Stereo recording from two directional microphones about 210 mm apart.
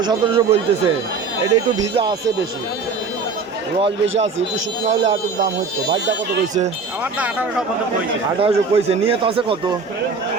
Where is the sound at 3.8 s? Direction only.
30° right (ahead or behind).